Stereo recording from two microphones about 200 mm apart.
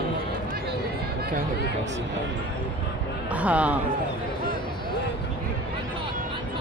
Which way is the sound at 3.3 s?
5° right (ahead or behind).